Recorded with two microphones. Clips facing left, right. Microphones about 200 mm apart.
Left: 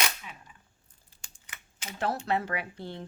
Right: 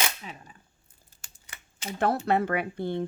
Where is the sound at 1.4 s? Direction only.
35° right (ahead or behind).